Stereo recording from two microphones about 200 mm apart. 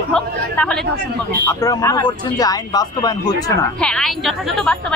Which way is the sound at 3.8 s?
5° left (ahead or behind).